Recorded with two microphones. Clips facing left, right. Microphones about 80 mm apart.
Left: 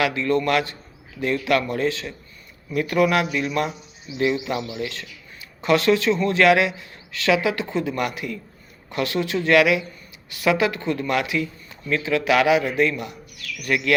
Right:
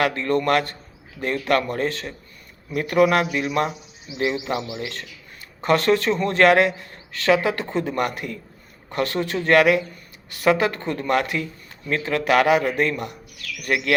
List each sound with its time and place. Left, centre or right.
0.0 s a man's voice: right
4.1 s speech: centre
4.8 s a man's voice: right
13.7 s speech: right